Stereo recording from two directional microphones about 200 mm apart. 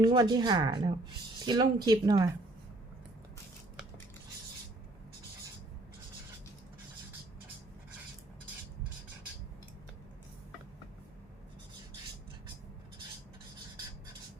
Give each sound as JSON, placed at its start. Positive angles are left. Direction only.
{"t": 0.0, "sound": "speech", "side_deg": -20}